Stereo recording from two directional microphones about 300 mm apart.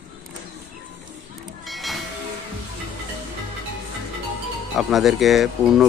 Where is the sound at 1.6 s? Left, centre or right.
Centre.